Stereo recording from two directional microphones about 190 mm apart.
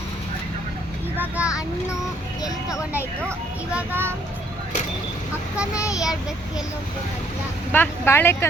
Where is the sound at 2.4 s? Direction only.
15° left (ahead or behind).